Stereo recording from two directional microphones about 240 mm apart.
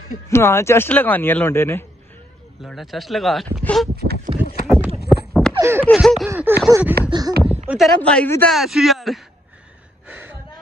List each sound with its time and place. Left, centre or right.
0.3 s speech: centre
2.6 s speech: centre
3.9 s speech: right
5.1 s a sound: centre
5.5 s a sound: centre
5.9 s speech: centre
6.3 s a sound: centre
7.1 s speech: centre
10.0 s gasp: centre